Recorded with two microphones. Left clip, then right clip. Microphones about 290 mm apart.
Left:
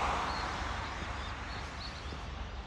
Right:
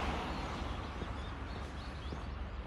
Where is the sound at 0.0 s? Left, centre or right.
Left.